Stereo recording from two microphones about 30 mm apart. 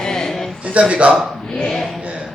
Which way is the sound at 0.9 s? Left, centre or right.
Right.